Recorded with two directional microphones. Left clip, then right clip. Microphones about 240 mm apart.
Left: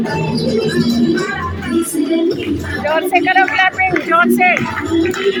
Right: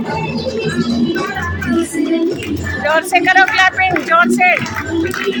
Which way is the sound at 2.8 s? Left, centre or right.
Centre.